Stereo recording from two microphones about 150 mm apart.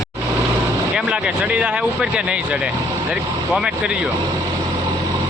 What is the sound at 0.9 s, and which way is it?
Speech, 10° right (ahead or behind).